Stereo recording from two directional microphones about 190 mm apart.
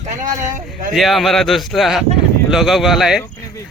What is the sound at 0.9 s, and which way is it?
Speech, centre (ahead or behind).